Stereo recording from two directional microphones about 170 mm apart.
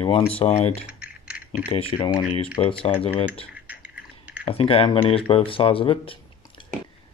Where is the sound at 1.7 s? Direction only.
35° left (ahead or behind).